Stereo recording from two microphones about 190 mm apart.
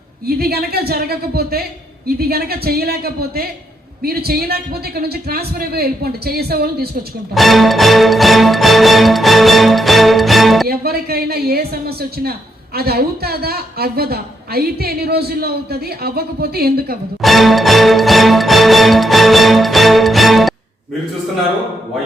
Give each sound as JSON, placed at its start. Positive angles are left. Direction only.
{"t": 0.3, "sound": "a woman's voice", "side_deg": -55}
{"t": 7.3, "sound": "music", "side_deg": 0}
{"t": 10.7, "sound": "a woman's voice", "side_deg": -55}
{"t": 17.2, "sound": "music", "side_deg": 0}